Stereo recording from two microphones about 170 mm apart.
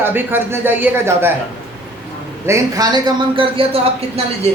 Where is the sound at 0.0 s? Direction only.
10° right (ahead or behind).